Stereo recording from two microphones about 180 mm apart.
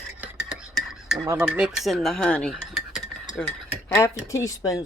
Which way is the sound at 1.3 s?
10° right (ahead or behind).